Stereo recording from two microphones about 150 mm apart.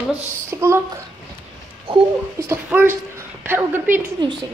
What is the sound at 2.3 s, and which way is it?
A woman's voice, 15° right (ahead or behind).